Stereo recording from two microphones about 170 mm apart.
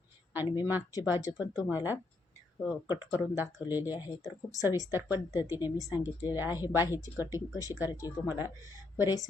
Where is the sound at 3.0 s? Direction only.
10° right (ahead or behind).